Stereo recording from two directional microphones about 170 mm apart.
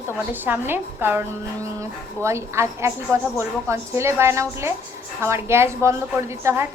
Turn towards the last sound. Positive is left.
turn(degrees=-15)  # may be behind; listen again after turning